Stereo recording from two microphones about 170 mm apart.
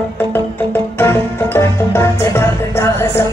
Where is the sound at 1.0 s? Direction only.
15° left (ahead or behind).